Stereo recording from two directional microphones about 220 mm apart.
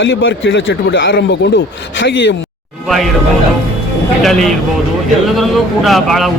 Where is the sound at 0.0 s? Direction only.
60° left (ahead or behind).